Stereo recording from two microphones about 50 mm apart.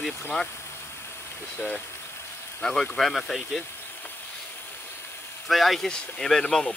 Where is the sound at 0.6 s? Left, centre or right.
Left.